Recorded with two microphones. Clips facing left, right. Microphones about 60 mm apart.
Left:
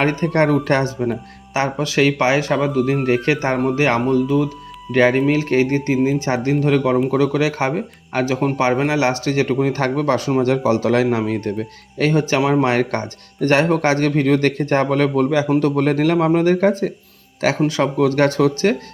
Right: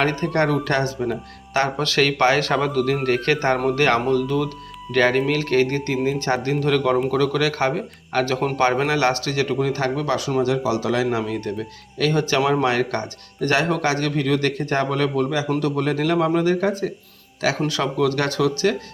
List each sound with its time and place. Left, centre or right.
0.0 s speech: left
1.5 s speech: centre; by 15.4 s left
15.4 s speech: left
15.7 s speech: left